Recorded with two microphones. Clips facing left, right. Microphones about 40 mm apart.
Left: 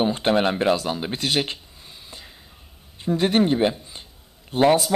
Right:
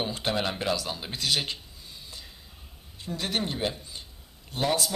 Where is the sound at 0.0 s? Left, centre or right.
Left.